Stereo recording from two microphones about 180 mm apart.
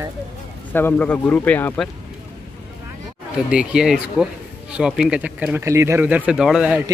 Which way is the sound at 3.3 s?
5° right (ahead or behind).